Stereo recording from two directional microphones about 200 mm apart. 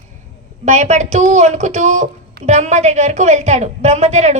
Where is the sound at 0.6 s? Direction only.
35° right (ahead or behind).